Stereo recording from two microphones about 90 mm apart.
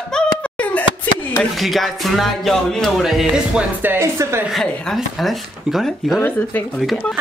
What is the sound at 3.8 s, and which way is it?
Speech, 20° right (ahead or behind).